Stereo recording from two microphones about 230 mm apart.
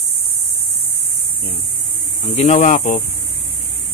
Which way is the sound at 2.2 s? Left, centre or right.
Left.